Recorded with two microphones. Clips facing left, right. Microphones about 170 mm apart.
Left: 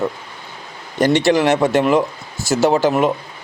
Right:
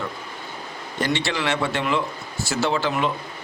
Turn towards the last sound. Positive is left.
turn(degrees=45)  # may be behind; listen again after turning